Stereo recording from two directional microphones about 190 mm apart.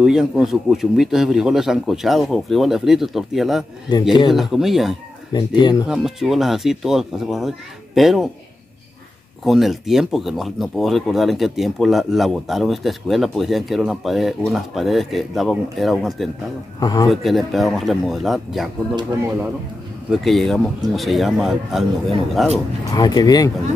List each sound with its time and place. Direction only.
0.0 s speech: 5° right (ahead or behind)
5.6 s speech: 25° left (ahead or behind)
5.9 s speech: 5° right (ahead or behind)
9.4 s speech: centre (ahead or behind)
16.8 s speech: 20° left (ahead or behind)
17.1 s speech: centre (ahead or behind)
18.9 s speech: 15° right (ahead or behind)
20.1 s speech: centre (ahead or behind)
22.8 s speech: 20° left (ahead or behind)